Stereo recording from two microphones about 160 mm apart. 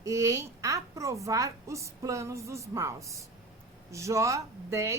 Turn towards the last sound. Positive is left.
turn(degrees=-20)  # may be behind; listen again after turning